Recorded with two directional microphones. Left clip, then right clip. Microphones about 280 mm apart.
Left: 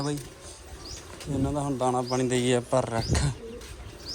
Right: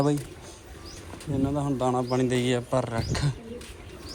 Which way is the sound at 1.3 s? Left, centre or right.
Centre.